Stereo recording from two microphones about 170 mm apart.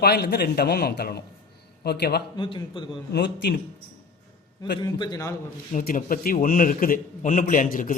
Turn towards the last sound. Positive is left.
turn(degrees=55)  # may be behind; listen again after turning